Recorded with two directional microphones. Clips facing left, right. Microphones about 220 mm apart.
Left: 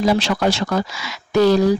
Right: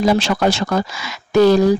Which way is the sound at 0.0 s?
50° right (ahead or behind).